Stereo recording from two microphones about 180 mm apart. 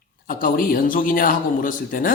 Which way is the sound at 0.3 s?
50° left (ahead or behind).